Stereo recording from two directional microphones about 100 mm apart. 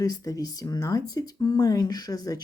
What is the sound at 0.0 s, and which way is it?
Speech, 40° left (ahead or behind).